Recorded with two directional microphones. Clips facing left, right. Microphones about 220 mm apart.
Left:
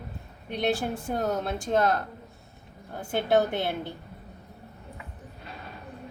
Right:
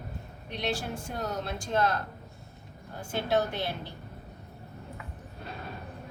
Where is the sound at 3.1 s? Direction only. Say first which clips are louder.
Left 5 dB; 55° left (ahead or behind).